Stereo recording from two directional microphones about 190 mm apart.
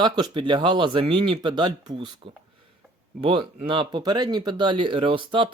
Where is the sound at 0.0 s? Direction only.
25° right (ahead or behind).